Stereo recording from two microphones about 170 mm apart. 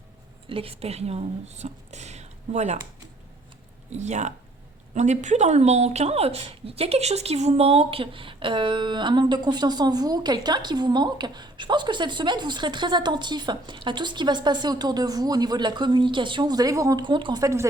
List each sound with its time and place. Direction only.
0.4 s speech: 35° right (ahead or behind)
3.8 s speech: 40° right (ahead or behind); by 17.7 s 20° right (ahead or behind)